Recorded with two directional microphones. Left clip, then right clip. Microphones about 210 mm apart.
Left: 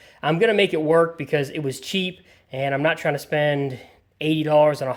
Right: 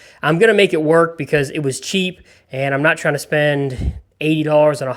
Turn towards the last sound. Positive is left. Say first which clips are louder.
# right 4 dB
turn(degrees=-15)  # may be behind; listen again after turning